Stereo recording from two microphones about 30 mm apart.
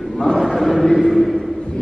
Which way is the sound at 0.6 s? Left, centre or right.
Centre.